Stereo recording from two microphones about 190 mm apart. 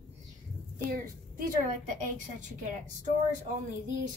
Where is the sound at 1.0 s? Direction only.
45° right (ahead or behind).